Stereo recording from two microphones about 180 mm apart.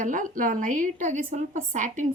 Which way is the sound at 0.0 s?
45° right (ahead or behind).